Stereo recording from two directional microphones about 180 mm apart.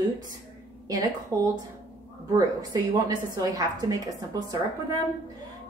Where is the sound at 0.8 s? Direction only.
20° right (ahead or behind).